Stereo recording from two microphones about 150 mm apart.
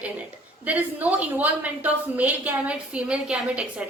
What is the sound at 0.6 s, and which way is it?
A woman's voice, 10° right (ahead or behind).